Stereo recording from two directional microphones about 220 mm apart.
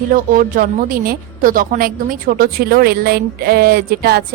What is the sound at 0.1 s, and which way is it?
A woman's voice, 40° right (ahead or behind).